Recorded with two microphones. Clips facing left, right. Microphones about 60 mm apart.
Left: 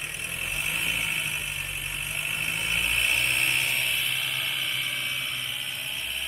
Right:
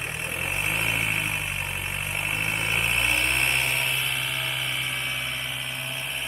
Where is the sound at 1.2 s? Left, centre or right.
Right.